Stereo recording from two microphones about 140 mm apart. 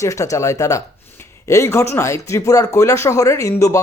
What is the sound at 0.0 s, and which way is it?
Speech, 20° left (ahead or behind).